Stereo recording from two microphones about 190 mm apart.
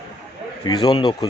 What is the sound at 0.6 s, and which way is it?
Speech, 25° left (ahead or behind).